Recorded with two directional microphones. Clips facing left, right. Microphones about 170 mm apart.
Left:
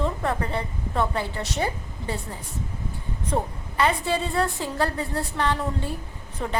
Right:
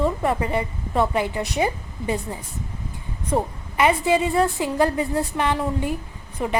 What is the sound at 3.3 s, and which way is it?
A woman's voice, 10° right (ahead or behind).